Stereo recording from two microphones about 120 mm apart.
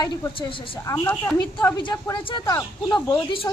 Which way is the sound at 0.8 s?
25° left (ahead or behind).